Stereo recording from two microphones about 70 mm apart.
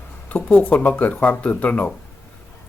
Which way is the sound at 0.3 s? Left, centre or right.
Left.